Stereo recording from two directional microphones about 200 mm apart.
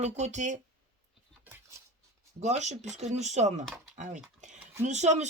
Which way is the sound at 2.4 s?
35° right (ahead or behind).